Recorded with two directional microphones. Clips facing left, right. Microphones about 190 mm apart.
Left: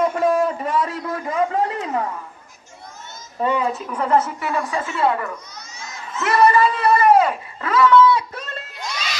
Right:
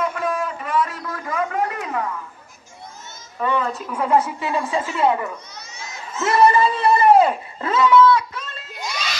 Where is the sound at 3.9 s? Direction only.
10° right (ahead or behind); by 7.9 s 25° right (ahead or behind).